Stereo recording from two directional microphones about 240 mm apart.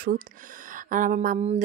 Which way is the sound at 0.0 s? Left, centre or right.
Right.